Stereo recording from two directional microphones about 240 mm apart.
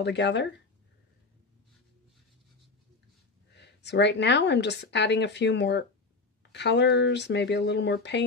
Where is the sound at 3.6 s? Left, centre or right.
Left.